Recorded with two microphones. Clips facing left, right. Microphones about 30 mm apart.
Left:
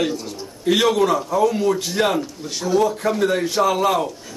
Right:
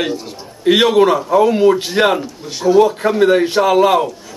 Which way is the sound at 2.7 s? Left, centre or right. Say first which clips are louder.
Right 6 dB; right.